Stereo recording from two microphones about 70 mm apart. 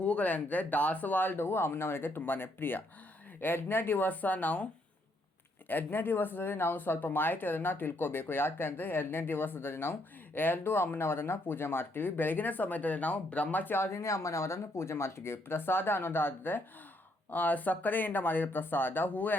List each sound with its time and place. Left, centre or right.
0.0 s speech: centre